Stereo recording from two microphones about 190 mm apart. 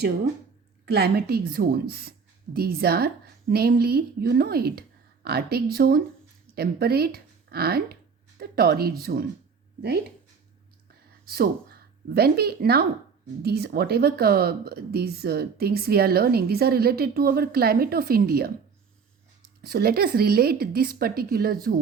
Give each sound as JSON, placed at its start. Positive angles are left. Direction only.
{"t": 0.9, "sound": "a woman's voice", "side_deg": -55}
{"t": 11.3, "sound": "speech", "side_deg": -55}
{"t": 19.6, "sound": "a woman's voice", "side_deg": -55}